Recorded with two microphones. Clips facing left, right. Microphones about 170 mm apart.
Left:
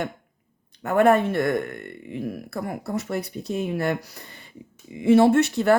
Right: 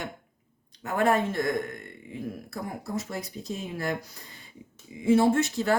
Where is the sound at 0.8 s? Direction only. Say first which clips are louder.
Left 6 dB; 60° left (ahead or behind).